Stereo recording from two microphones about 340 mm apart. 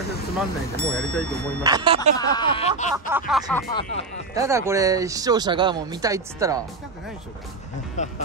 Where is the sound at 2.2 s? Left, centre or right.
Centre.